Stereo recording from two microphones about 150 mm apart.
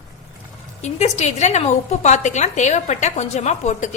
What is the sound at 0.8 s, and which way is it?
A woman's voice, 50° left (ahead or behind).